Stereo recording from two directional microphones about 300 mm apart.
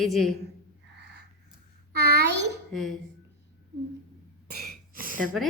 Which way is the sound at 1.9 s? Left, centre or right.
Right.